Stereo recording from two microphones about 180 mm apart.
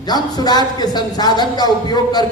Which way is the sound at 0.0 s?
20° left (ahead or behind).